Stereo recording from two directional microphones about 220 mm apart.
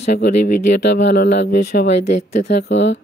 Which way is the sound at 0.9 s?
45° left (ahead or behind).